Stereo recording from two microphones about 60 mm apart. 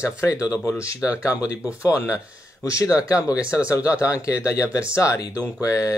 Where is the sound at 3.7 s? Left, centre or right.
Left.